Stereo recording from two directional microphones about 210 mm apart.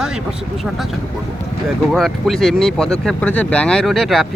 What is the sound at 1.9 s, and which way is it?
Speech, centre (ahead or behind).